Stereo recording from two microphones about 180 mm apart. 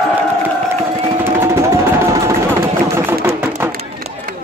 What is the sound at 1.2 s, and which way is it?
Music, 15° right (ahead or behind).